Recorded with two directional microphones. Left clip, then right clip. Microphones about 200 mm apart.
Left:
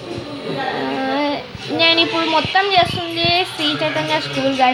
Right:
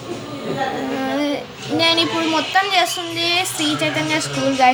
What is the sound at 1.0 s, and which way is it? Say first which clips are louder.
Child singing: left 2 dB; 30° left (ahead or behind).